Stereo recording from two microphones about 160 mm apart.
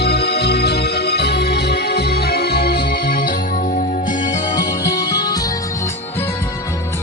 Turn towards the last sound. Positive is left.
turn(degrees=15)  # may be behind; listen again after turning